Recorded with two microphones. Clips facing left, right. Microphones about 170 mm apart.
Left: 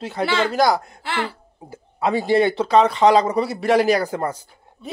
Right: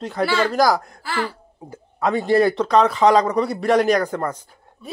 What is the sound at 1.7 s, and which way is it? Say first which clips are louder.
Speech: even; 10° left (ahead or behind).